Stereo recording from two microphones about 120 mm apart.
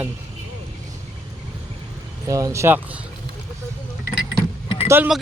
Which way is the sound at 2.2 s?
25° right (ahead or behind).